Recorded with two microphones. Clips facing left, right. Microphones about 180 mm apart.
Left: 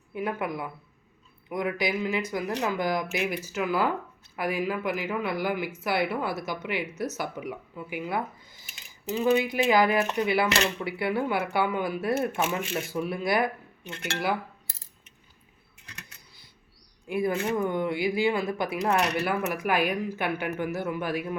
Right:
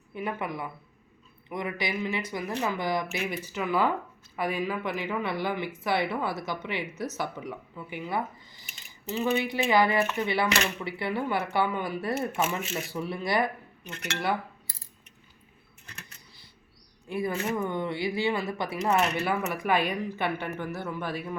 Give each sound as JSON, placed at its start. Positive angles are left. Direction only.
{"t": 0.1, "sound": "speech", "side_deg": 5}
{"t": 9.2, "sound": "speech", "side_deg": 5}
{"t": 17.1, "sound": "speech", "side_deg": 0}
{"t": 18.3, "sound": "speech", "side_deg": 0}